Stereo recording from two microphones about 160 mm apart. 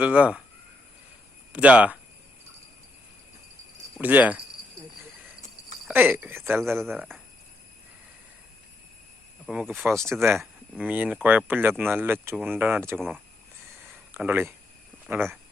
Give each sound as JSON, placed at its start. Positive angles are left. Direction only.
{"t": 0.0, "sound": "speech", "side_deg": -10}
{"t": 1.5, "sound": "speech", "side_deg": -10}
{"t": 4.0, "sound": "speech", "side_deg": -10}
{"t": 5.9, "sound": "speech", "side_deg": -10}
{"t": 9.5, "sound": "speech", "side_deg": -10}
{"t": 13.0, "sound": "speech", "side_deg": 0}
{"t": 14.1, "sound": "speech", "side_deg": -15}